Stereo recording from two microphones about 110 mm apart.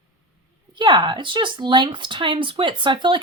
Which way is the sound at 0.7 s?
45° right (ahead or behind).